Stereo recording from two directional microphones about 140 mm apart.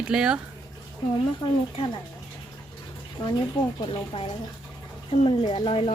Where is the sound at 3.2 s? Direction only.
35° left (ahead or behind).